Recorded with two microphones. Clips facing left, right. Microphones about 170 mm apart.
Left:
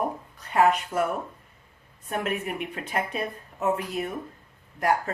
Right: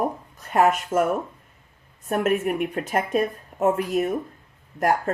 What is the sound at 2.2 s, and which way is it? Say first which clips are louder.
Speech: right 8 dB; 50° right (ahead or behind).